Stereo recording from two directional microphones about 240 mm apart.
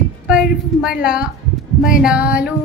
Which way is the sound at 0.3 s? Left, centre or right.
Centre.